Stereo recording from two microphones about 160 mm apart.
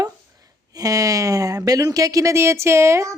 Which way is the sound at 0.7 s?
20° right (ahead or behind).